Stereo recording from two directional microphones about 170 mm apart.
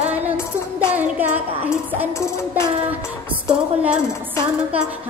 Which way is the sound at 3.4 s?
5° right (ahead or behind).